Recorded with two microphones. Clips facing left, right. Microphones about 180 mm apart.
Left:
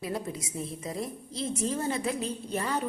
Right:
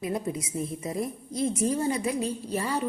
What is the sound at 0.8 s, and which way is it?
A woman's voice, 20° right (ahead or behind).